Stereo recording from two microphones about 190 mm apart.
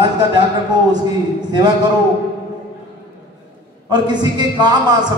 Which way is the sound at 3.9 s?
20° right (ahead or behind).